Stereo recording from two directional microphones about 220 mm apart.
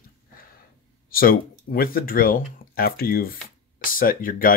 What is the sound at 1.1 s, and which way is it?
Speech, 40° left (ahead or behind).